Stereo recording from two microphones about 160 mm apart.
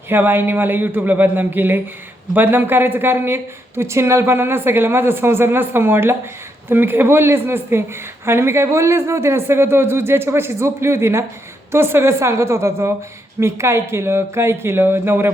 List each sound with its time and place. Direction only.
0.1 s speech: 15° right (ahead or behind)